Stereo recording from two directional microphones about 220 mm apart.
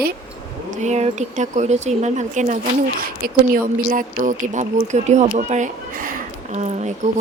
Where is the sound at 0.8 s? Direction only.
30° right (ahead or behind).